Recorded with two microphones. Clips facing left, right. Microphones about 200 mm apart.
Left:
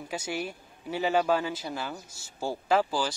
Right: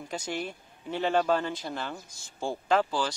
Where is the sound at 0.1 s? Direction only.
10° left (ahead or behind).